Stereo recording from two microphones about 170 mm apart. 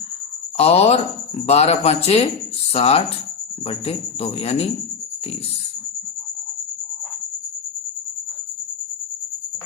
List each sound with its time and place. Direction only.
0.5 s speech: 35° left (ahead or behind)